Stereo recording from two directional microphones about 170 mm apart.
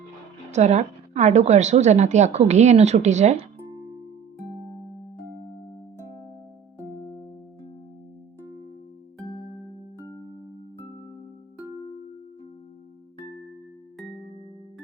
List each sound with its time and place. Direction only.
0.5 s a woman's voice: 40° right (ahead or behind)